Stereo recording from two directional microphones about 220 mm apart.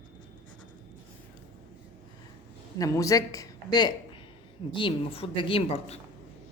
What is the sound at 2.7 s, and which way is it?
A woman's voice, 15° left (ahead or behind).